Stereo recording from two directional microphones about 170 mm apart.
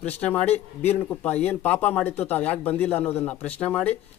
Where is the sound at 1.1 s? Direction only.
10° left (ahead or behind).